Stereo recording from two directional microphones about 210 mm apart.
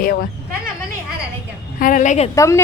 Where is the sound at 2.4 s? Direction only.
15° left (ahead or behind).